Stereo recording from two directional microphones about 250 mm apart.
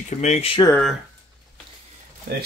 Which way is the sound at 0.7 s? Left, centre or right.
Centre.